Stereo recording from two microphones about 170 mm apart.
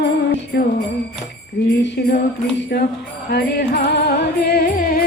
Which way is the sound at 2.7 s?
70° left (ahead or behind).